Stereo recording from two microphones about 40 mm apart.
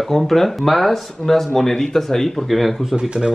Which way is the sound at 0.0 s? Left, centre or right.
Centre.